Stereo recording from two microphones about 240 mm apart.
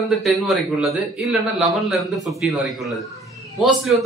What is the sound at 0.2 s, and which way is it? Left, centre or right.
A man's voice, centre.